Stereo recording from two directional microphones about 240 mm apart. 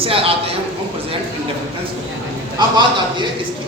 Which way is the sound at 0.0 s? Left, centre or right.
Right.